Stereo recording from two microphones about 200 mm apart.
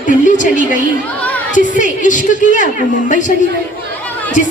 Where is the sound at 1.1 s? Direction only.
5° left (ahead or behind).